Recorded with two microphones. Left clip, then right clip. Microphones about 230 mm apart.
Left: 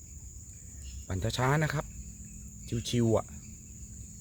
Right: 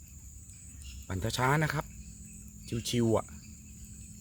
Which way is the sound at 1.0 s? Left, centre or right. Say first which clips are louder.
Right 1 dB; centre.